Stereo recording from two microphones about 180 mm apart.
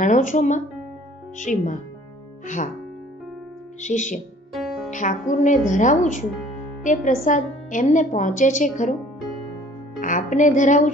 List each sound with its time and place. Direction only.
0.0 s a woman's voice: 45° left (ahead or behind)
3.8 s a woman's voice: 45° left (ahead or behind)
4.6 s music: centre (ahead or behind)
4.9 s a woman's voice: 45° left (ahead or behind)
9.9 s a woman's voice: 45° left (ahead or behind)